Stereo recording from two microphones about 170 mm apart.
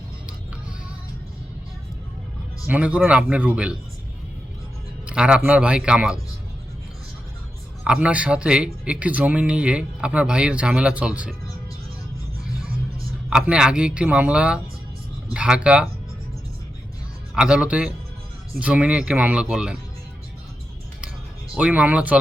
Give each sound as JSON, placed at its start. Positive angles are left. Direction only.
{"t": 2.6, "sound": "speech", "side_deg": -10}
{"t": 5.0, "sound": "speech", "side_deg": -5}
{"t": 7.9, "sound": "speech", "side_deg": -5}
{"t": 13.3, "sound": "speech", "side_deg": -5}
{"t": 17.3, "sound": "speech", "side_deg": -5}
{"t": 21.5, "sound": "speech", "side_deg": -5}